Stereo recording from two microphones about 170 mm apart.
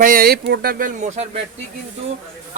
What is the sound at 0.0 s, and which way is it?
Speech, 60° right (ahead or behind).